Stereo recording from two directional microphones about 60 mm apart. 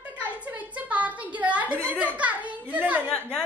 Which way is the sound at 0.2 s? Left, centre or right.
Right.